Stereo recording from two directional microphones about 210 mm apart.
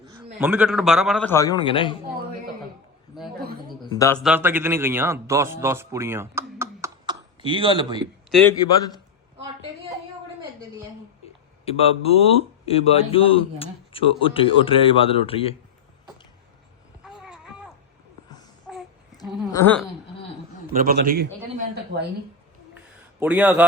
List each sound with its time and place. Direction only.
0.3 s a man's voice: 5° right (ahead or behind)
1.3 s speech: 15° left (ahead or behind)
3.9 s speech: 15° left (ahead or behind)
4.2 s a man's voice: 5° right (ahead or behind); by 8.0 s 25° right (ahead or behind)
8.3 s speech: 5° left (ahead or behind)
11.6 s speech: 30° left (ahead or behind)
17.0 s a sound: 5° right (ahead or behind)
19.5 s speech: 10° left (ahead or behind)
20.7 s speech: 45° right (ahead or behind)
23.2 s a man's voice: 5° right (ahead or behind)